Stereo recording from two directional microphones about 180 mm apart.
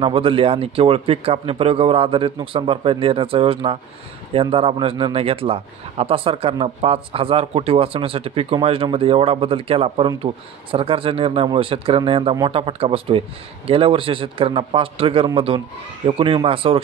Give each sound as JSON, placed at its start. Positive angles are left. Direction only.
{"t": 0.0, "sound": "a man's voice", "side_deg": -30}